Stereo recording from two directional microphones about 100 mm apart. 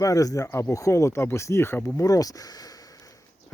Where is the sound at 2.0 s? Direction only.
35° left (ahead or behind).